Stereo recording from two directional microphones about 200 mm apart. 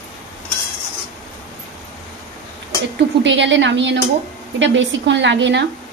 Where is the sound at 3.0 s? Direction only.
65° right (ahead or behind).